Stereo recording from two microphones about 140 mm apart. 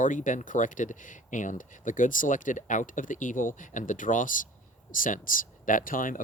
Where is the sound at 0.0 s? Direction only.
65° left (ahead or behind).